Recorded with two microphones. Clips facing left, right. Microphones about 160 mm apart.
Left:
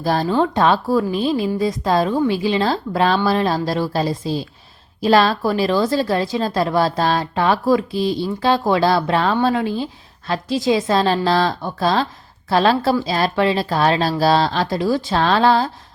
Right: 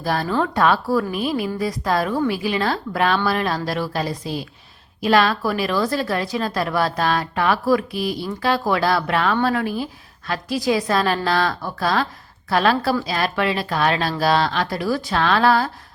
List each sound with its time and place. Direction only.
0.0 s a woman's voice: 30° left (ahead or behind)